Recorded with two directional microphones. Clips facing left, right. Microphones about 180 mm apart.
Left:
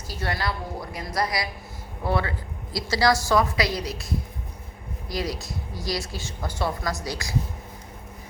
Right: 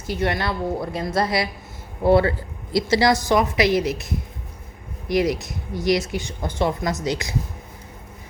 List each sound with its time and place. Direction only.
0.1 s a woman's voice: 20° right (ahead or behind)